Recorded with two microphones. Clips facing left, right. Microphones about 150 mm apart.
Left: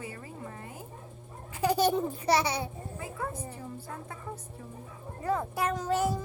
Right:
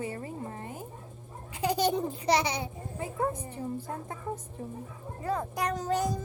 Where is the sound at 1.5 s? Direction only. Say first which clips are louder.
Left 2 dB; 15° right (ahead or behind).